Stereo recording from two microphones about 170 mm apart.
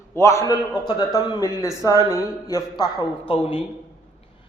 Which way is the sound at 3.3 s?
30° left (ahead or behind).